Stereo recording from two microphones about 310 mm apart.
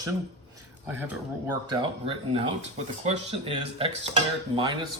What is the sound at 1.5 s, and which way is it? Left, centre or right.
Speech, centre.